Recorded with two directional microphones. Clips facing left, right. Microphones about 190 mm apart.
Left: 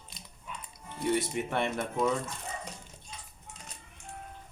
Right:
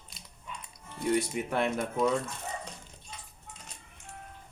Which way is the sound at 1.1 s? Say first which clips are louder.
Right 2 dB; centre (ahead or behind).